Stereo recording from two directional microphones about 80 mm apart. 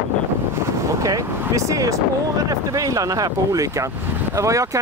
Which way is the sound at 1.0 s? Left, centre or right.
Right.